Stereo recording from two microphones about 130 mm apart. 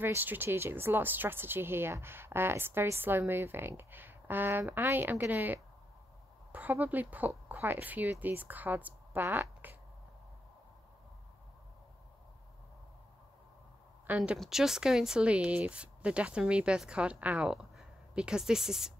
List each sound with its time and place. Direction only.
0.0 s a woman's voice: 15° right (ahead or behind)
14.0 s a woman's voice: 10° right (ahead or behind)